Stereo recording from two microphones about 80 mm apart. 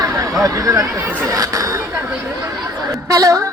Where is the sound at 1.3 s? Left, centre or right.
Right.